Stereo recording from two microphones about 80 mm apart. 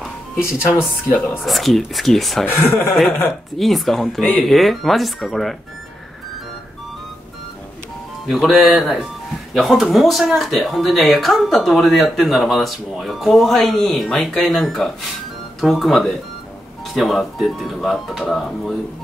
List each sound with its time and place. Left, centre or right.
0.4 s speech: left
1.4 s speech: centre
2.4 s speech: left
3.3 s speech: centre
8.3 s speech: centre